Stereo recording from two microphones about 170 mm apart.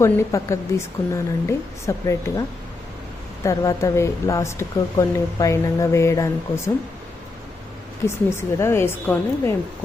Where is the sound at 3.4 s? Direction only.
20° left (ahead or behind).